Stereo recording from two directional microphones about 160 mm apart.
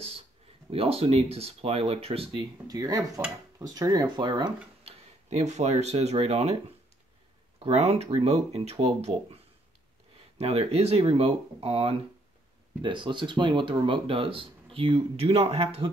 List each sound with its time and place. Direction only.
0.7 s speech: 35° right (ahead or behind)
2.7 s speech: 25° right (ahead or behind)
4.8 s speech: 45° right (ahead or behind)